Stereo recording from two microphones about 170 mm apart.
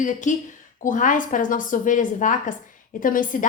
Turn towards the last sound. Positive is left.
turn(degrees=55)  # may be behind; listen again after turning